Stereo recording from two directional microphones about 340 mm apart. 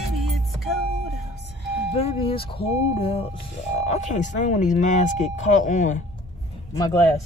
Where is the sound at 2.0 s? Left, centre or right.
Centre.